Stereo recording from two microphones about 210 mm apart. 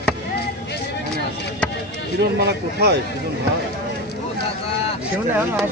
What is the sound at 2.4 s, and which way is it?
Speech, 50° right (ahead or behind).